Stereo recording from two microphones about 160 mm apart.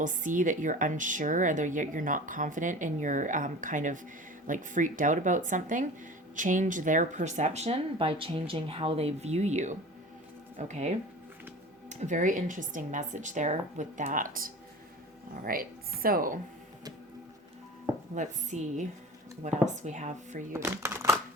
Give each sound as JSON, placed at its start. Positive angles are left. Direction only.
{"t": 0.0, "sound": "speech", "side_deg": -55}
{"t": 18.1, "sound": "speech", "side_deg": -50}
{"t": 20.5, "sound": "speech", "side_deg": -15}